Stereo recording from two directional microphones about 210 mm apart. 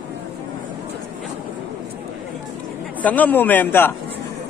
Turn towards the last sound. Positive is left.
turn(degrees=10)  # may be behind; listen again after turning